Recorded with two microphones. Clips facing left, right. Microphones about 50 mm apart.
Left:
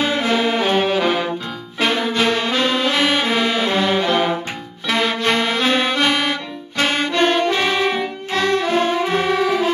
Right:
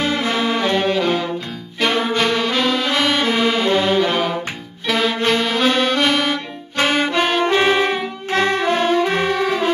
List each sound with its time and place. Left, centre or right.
0.0 s saxophone: centre
0.5 s brass instrument: left
0.7 s music: centre
1.8 s brass instrument: centre
3.4 s music: centre
6.9 s saxophone: centre
7.5 s music: centre
9.2 s brass instrument: centre